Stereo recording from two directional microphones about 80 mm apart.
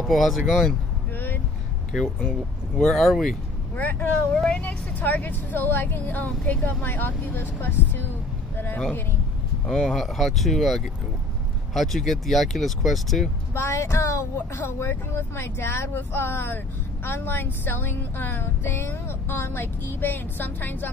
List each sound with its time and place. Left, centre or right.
0.0 s speech: centre
1.1 s vehicle: left
1.9 s speech: centre
3.7 s a woman's voice: left
9.7 s speech: centre
13.6 s a woman's voice: left